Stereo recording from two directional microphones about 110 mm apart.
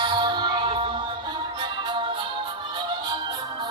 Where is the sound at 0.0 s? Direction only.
45° right (ahead or behind).